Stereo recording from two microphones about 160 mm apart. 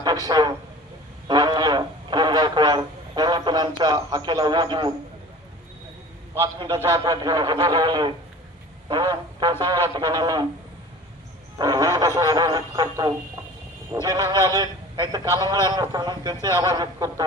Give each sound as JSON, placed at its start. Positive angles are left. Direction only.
{"t": 0.3, "sound": "speech", "side_deg": -25}
{"t": 1.3, "sound": "a sound", "side_deg": -25}
{"t": 6.4, "sound": "speech", "side_deg": -30}
{"t": 11.5, "sound": "speech", "side_deg": -20}